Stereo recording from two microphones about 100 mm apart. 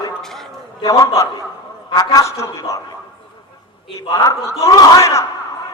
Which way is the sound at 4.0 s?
35° left (ahead or behind).